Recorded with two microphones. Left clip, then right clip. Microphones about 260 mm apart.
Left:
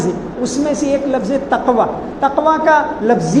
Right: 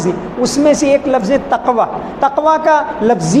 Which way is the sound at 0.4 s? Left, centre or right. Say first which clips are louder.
Right 6 dB; right.